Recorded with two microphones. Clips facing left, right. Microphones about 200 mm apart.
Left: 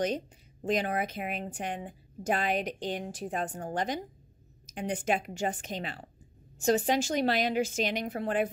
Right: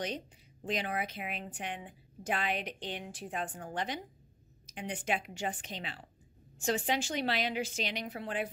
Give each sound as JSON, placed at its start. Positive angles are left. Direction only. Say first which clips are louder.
{"t": 0.0, "sound": "speech", "louder": "left 7 dB", "side_deg": 45}